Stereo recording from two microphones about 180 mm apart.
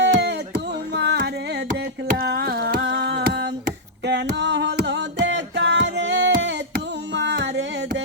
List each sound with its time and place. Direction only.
0.0 s music: 75° right (ahead or behind)
0.9 s carnatic music: 70° right (ahead or behind)
2.1 s a sound: 55° right (ahead or behind); by 5.0 s 75° right (ahead or behind)
5.2 s music: 80° right